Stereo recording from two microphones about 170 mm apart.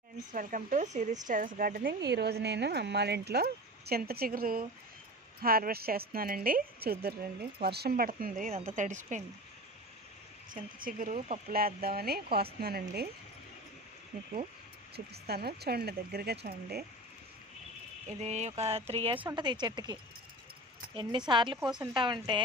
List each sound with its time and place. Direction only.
0.3 s a woman's voice: 50° right (ahead or behind)
10.5 s speech: 55° right (ahead or behind)
14.9 s speech: 70° right (ahead or behind)
18.2 s speech: 40° right (ahead or behind)